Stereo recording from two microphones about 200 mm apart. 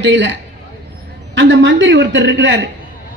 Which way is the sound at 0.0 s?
65° right (ahead or behind).